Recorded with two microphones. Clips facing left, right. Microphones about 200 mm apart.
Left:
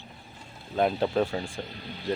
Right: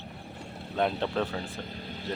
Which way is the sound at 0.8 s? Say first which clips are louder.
Left 4 dB; 5° left (ahead or behind).